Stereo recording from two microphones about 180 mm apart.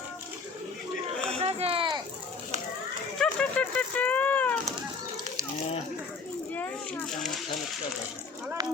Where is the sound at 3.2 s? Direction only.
5° left (ahead or behind).